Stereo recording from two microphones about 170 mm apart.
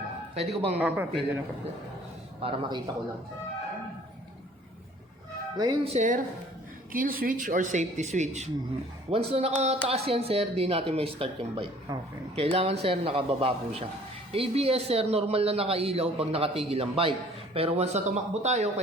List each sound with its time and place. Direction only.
0.3 s a man's voice: 35° right (ahead or behind)
0.8 s a man's voice: 10° right (ahead or behind)
2.4 s a man's voice: 30° right (ahead or behind)
5.5 s a man's voice: 25° right (ahead or behind)